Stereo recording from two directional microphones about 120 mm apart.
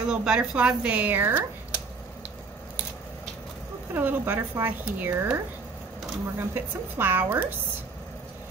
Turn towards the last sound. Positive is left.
turn(degrees=-15)  # may be behind; listen again after turning